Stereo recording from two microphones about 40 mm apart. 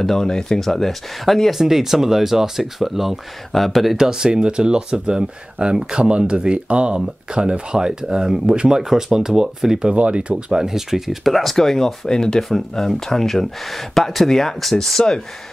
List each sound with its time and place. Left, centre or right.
0.0 s speech: centre
0.6 s speech: centre
3.9 s speech: centre
9.9 s speech: right
10.3 s speech: centre
11.5 s speech: centre